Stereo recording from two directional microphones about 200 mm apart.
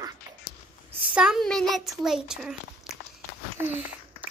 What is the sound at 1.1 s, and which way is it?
A woman's voice, 5° right (ahead or behind).